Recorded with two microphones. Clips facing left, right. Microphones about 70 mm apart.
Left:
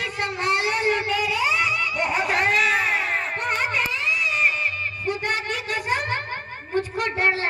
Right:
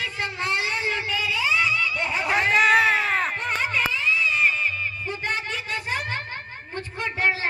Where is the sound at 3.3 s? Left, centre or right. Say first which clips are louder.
Left 1 dB; left.